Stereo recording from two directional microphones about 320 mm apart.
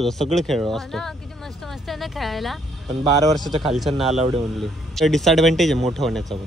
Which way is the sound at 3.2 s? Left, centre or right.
Centre.